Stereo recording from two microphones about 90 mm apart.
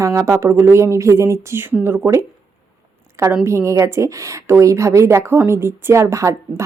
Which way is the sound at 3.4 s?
30° right (ahead or behind).